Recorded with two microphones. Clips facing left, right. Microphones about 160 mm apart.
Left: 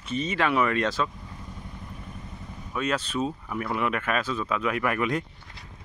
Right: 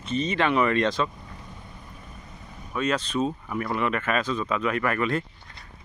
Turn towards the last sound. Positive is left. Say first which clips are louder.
# right 1 dB
turn(degrees=10)  # may be behind; listen again after turning